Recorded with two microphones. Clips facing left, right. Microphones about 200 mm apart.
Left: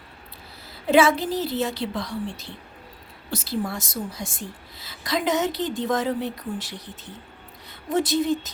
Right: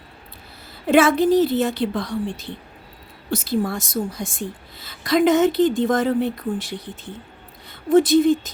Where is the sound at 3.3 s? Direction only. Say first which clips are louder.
Right 5 dB; 50° right (ahead or behind).